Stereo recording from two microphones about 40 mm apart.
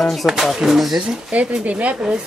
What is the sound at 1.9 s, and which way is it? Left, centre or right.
Speech, centre.